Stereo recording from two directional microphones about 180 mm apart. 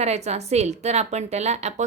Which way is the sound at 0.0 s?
35° right (ahead or behind).